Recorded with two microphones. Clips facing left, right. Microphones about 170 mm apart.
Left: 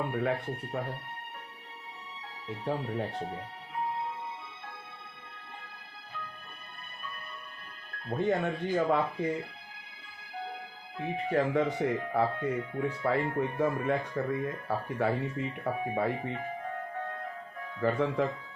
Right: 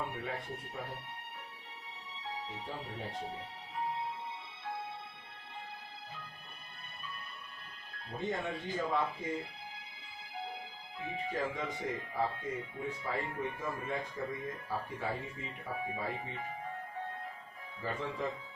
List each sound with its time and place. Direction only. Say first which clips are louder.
0.1 s speech: left 9 dB; 65° left (ahead or behind)
2.7 s speech: left 13 dB; 60° left (ahead or behind)
8.0 s speech: left 8 dB; 65° left (ahead or behind)
11.0 s speech: left 8 dB; 65° left (ahead or behind)
17.7 s speech: left 10 dB; 65° left (ahead or behind)